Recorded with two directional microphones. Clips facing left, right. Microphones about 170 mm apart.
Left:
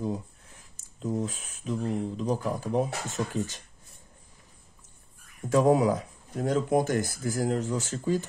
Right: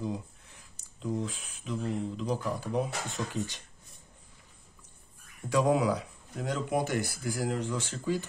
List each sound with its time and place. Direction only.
0.9 s speech: 45° left (ahead or behind)
5.5 s speech: 45° left (ahead or behind)